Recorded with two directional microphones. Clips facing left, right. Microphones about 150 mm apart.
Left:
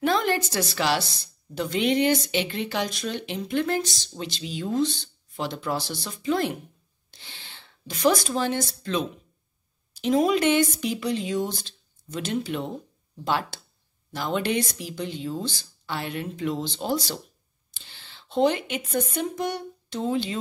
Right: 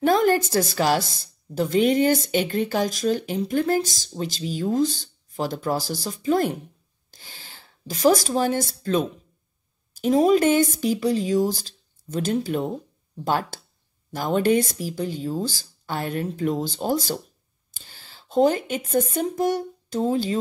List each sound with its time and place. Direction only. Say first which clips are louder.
0.0 s speech: right 5 dB; 45° right (ahead or behind)